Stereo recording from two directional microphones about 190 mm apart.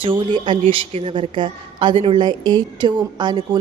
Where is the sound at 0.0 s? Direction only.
25° right (ahead or behind).